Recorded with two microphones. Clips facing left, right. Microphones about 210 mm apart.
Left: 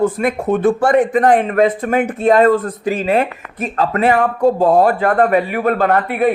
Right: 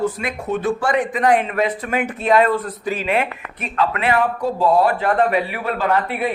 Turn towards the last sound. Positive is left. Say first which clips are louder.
# left 5 dB
turn(degrees=55)  # may be behind; listen again after turning